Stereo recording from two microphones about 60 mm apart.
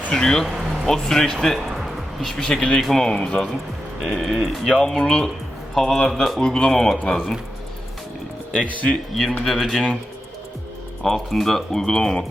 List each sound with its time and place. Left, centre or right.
0.1 s speech: centre
4.0 s speech: centre
8.7 s speech: left
9.4 s speech: centre
11.0 s speech: centre